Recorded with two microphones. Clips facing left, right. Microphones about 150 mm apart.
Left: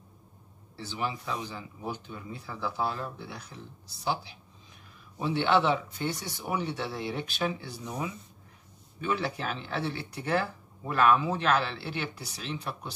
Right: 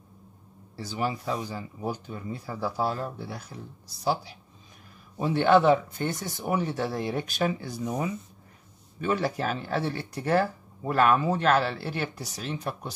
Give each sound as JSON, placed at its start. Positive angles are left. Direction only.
{"t": 0.7, "sound": "speech", "side_deg": -40}
{"t": 5.2, "sound": "speech", "side_deg": -45}